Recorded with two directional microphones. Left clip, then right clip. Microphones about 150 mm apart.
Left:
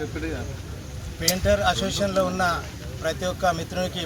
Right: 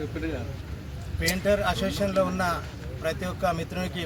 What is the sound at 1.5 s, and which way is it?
Speech, 15° right (ahead or behind).